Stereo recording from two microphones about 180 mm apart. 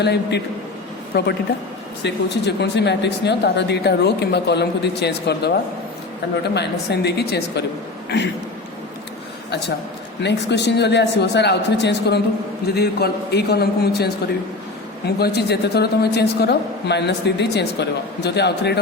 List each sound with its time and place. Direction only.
0.0 s a woman's voice: 70° left (ahead or behind)
6.5 s a woman's voice: 70° left (ahead or behind)
10.2 s a woman's voice: 70° left (ahead or behind)